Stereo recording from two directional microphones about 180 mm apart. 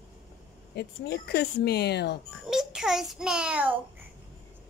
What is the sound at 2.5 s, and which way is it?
A child's voice, 5° right (ahead or behind).